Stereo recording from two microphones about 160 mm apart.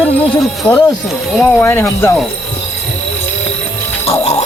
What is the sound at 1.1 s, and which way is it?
Speech, centre (ahead or behind).